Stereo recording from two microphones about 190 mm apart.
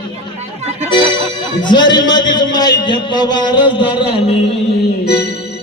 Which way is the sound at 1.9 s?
20° left (ahead or behind).